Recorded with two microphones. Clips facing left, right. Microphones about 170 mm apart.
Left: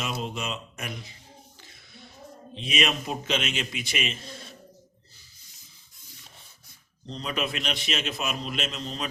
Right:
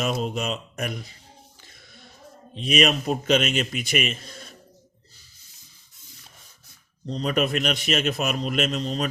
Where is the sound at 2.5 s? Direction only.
45° right (ahead or behind).